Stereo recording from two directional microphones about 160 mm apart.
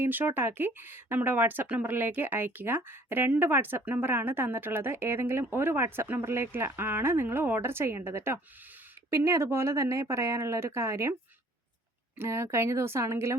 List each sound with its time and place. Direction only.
0.0 s speech: 15° right (ahead or behind)
12.1 s speech: 15° right (ahead or behind)